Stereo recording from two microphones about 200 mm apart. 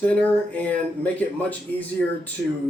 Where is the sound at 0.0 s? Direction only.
5° left (ahead or behind).